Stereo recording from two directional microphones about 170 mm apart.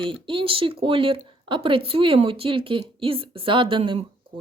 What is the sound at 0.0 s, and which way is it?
Speech, 30° right (ahead or behind).